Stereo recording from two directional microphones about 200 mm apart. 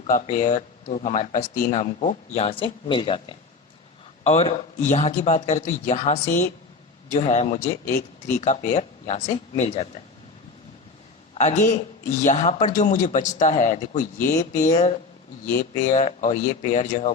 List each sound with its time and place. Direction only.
0.1 s speech: 40° left (ahead or behind)
11.3 s speech: 35° left (ahead or behind)